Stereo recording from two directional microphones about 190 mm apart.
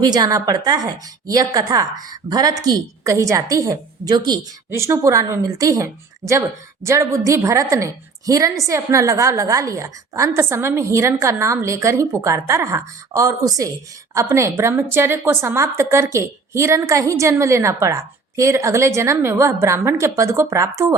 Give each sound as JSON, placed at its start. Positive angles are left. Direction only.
{"t": 0.1, "sound": "a woman's voice", "side_deg": -20}